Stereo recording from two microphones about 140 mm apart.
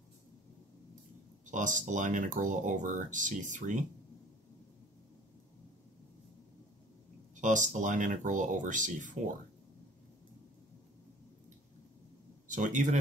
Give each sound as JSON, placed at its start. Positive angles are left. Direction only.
{"t": 1.4, "sound": "speech", "side_deg": -65}
{"t": 7.3, "sound": "speech", "side_deg": -65}
{"t": 12.4, "sound": "speech", "side_deg": -65}